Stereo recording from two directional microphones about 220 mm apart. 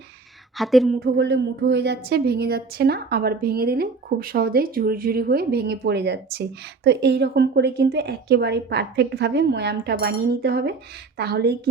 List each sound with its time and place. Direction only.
0.5 s a woman's voice: centre (ahead or behind)
1.0 s a woman's voice: 50° right (ahead or behind)